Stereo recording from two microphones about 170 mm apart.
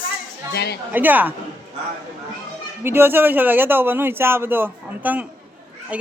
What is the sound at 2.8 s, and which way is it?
Speech, 15° right (ahead or behind).